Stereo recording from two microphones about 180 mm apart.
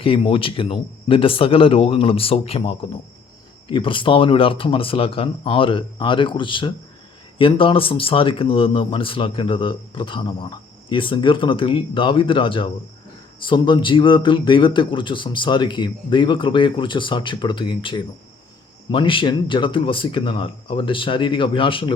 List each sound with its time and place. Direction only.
0.0 s speech: 30° left (ahead or behind)